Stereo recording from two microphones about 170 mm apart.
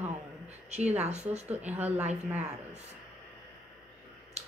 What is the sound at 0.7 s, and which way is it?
Speech, 40° right (ahead or behind).